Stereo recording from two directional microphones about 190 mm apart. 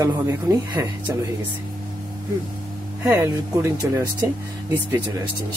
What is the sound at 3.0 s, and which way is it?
Speech, 15° right (ahead or behind).